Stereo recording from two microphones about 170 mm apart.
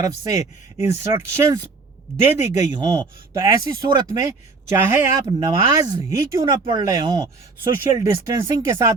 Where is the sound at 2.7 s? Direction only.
25° right (ahead or behind).